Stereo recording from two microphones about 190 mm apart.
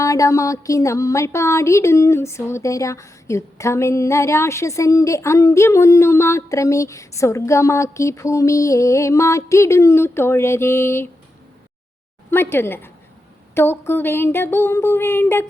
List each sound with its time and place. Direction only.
0.0 s speech: 15° left (ahead or behind)
12.3 s speech: 10° left (ahead or behind)